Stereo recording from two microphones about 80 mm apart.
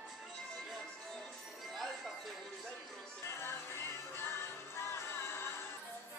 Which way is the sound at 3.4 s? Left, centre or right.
Left.